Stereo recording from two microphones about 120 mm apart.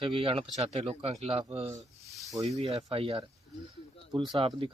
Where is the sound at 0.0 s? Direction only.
50° right (ahead or behind).